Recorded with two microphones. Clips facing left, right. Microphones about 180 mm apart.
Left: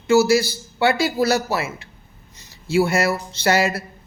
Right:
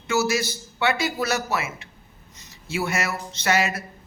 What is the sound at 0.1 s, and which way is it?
Speech, 30° left (ahead or behind).